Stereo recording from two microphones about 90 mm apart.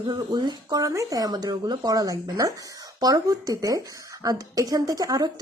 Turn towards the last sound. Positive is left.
turn(degrees=-45)  # may be behind; listen again after turning